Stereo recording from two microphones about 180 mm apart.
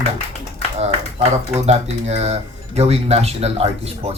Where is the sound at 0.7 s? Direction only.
35° right (ahead or behind).